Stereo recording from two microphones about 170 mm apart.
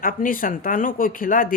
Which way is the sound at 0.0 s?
55° left (ahead or behind).